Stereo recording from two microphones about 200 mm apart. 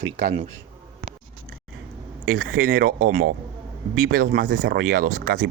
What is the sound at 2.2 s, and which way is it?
Speech, 45° right (ahead or behind).